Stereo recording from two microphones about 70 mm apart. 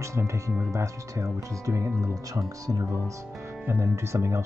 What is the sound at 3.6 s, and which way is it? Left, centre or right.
Speech, right.